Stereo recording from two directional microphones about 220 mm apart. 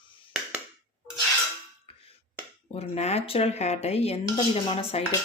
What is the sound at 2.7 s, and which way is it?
Speech, 30° left (ahead or behind).